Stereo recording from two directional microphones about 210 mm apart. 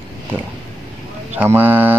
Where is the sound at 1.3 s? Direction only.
10° right (ahead or behind).